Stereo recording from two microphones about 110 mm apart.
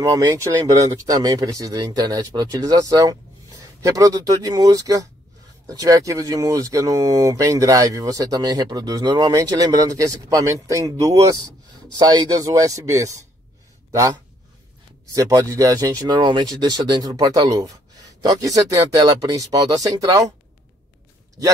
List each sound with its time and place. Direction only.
0.0 s speech: 30° right (ahead or behind)
15.0 s speech: 30° right (ahead or behind)